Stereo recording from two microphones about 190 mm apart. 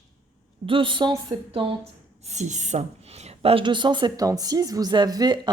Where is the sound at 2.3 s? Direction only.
40° right (ahead or behind).